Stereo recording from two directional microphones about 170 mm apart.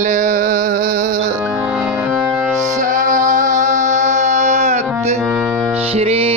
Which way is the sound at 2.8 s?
50° right (ahead or behind).